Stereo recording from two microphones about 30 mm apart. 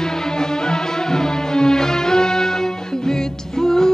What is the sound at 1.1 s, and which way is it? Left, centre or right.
Music, left.